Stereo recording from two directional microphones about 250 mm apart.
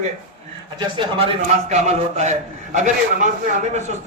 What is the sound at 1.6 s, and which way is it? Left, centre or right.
A man's voice, right.